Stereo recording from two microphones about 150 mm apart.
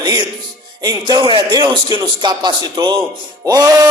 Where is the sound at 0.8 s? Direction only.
25° right (ahead or behind).